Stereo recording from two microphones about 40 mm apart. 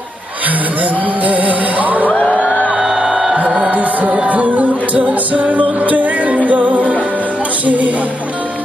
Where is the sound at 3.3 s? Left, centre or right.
Right.